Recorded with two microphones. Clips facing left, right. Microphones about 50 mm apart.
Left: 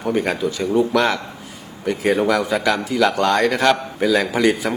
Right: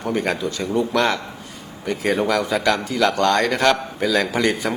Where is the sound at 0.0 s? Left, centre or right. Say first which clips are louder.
Left 2 dB; centre.